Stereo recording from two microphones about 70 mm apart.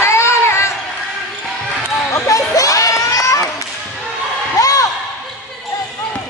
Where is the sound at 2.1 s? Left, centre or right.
Left.